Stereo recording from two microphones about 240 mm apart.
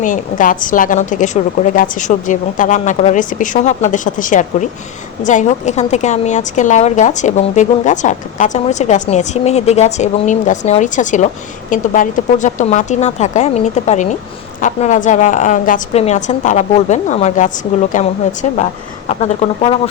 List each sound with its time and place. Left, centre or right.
0.0 s a woman's voice: left